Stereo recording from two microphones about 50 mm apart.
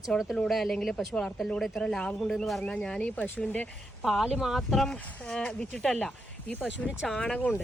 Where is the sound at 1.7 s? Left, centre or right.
Centre.